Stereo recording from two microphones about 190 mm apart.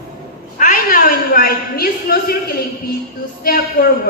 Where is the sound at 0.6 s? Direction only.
45° left (ahead or behind).